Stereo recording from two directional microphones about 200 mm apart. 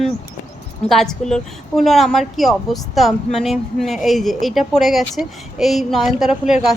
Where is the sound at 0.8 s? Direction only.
Centre (ahead or behind).